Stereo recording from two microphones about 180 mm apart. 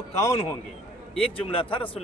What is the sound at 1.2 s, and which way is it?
Speech, 30° left (ahead or behind).